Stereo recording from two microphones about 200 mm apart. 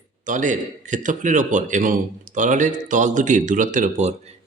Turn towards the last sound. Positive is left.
turn(degrees=-35)  # may be behind; listen again after turning